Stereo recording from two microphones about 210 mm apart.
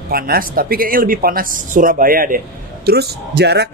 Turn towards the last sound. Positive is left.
turn(degrees=-50)  # may be behind; listen again after turning